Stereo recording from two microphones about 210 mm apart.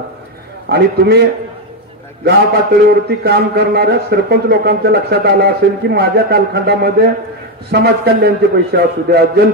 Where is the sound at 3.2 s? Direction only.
50° right (ahead or behind).